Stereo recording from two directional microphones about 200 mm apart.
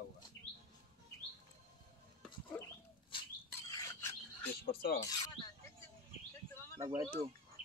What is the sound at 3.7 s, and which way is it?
Frog, 15° left (ahead or behind).